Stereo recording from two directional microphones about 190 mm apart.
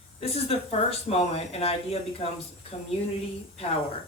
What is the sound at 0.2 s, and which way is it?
Speech, 30° left (ahead or behind).